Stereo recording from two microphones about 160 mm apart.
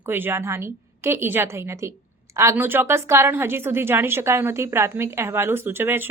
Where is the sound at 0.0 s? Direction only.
15° right (ahead or behind).